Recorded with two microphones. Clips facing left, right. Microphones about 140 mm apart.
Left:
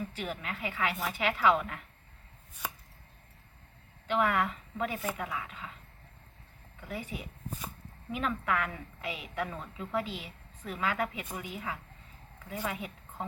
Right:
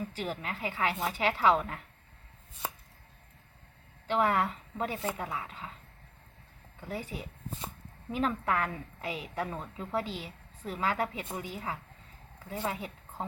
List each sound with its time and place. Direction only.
0.1 s a woman's voice: 35° right (ahead or behind)
4.0 s a woman's voice: 35° right (ahead or behind)
6.8 s a woman's voice: 35° right (ahead or behind)